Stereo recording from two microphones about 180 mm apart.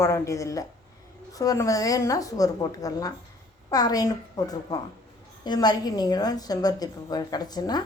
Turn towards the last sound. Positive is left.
turn(degrees=20)  # may be behind; listen again after turning